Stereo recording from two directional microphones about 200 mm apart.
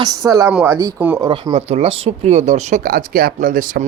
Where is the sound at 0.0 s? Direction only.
20° right (ahead or behind).